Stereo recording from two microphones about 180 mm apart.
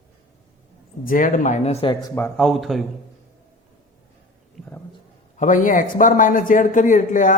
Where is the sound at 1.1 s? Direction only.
45° left (ahead or behind).